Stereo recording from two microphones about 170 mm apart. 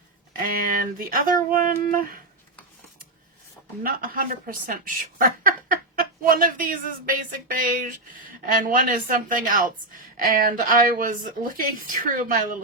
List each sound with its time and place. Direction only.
0.5 s speech: 55° right (ahead or behind)
3.8 s a woman's voice: 55° right (ahead or behind)